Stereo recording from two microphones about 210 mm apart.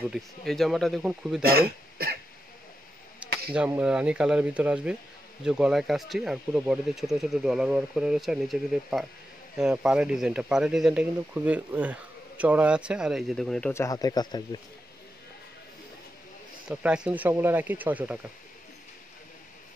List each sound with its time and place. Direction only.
0.1 s speech: centre (ahead or behind)
1.4 s speech: 45° right (ahead or behind)
3.2 s a sound: 5° right (ahead or behind)
3.5 s speech: 5° right (ahead or behind); by 14.6 s 20° left (ahead or behind)
16.6 s speech: 5° right (ahead or behind)